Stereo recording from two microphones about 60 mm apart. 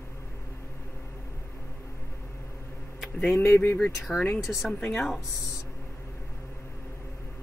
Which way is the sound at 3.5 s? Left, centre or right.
Left.